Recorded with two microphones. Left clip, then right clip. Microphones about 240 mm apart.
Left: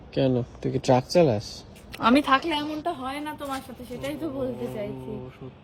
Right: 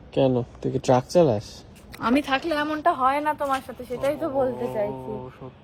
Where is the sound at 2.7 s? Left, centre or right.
Right.